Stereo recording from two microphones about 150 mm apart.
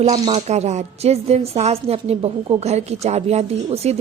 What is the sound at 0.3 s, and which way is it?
A woman's voice, 45° right (ahead or behind).